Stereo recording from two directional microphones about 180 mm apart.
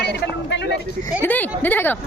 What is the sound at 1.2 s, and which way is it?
Speech, 10° left (ahead or behind).